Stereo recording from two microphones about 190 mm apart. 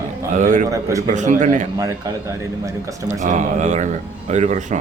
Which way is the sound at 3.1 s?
40° right (ahead or behind).